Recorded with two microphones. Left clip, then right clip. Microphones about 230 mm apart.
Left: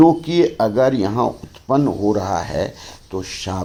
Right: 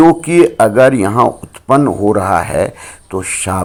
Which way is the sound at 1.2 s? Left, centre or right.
Right.